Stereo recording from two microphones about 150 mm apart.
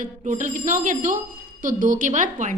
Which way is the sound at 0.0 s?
55° right (ahead or behind).